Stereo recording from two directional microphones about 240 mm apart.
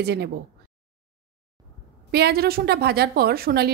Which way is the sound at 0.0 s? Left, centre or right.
Right.